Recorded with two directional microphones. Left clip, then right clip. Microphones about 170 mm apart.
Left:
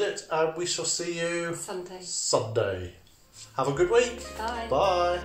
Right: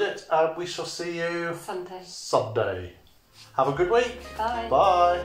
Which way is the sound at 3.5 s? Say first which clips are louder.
Right 2 dB; 30° left (ahead or behind).